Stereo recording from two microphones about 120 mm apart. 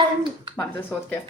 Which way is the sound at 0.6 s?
10° left (ahead or behind).